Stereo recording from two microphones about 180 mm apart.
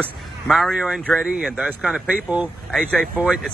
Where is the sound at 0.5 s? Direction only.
Centre (ahead or behind).